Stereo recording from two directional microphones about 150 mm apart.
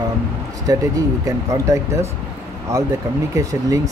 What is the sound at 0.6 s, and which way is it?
Speech, 20° right (ahead or behind).